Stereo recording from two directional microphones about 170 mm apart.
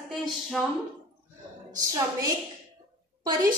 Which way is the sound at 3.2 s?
25° right (ahead or behind).